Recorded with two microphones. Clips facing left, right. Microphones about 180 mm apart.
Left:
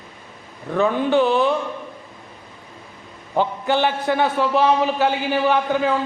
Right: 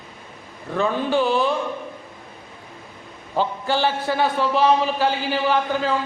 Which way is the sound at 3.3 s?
20° left (ahead or behind).